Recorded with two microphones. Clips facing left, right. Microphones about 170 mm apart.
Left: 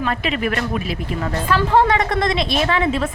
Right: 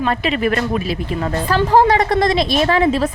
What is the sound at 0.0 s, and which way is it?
A woman's voice, 30° right (ahead or behind).